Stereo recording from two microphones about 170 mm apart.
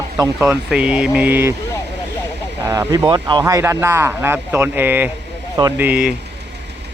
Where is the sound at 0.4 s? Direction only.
5° right (ahead or behind).